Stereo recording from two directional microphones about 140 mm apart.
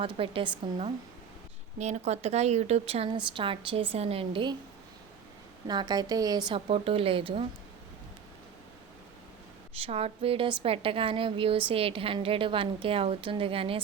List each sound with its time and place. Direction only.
0.2 s a woman's voice: 40° right (ahead or behind)
1.8 s a woman's voice: 55° right (ahead or behind); by 4.5 s 40° right (ahead or behind)
5.6 s a woman's voice: 30° right (ahead or behind)
6.5 s a woman's voice: 45° right (ahead or behind)
9.8 s a woman's voice: 45° right (ahead or behind)